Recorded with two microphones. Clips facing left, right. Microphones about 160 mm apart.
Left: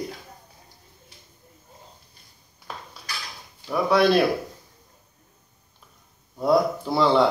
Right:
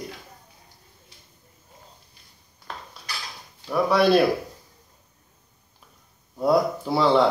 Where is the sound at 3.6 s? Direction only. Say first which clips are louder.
Even; centre (ahead or behind).